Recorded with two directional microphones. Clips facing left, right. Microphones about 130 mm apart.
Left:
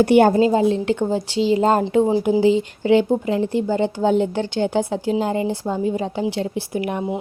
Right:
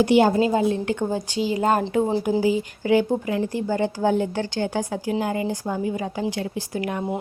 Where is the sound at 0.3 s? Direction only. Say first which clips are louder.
Left 4 dB; 25° left (ahead or behind).